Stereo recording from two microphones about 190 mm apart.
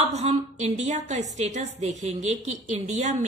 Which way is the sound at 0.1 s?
35° right (ahead or behind).